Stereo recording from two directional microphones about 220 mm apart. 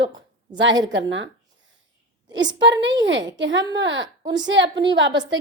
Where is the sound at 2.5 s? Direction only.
55° right (ahead or behind).